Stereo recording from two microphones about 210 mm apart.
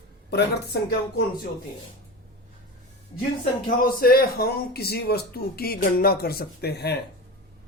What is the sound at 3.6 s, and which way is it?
A man's voice, 45° left (ahead or behind).